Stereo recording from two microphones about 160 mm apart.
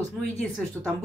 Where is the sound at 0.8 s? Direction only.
15° right (ahead or behind).